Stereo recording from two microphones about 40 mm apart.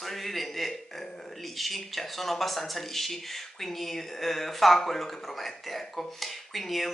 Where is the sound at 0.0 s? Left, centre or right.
Centre.